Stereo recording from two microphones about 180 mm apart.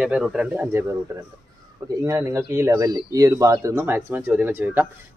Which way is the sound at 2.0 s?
15° right (ahead or behind).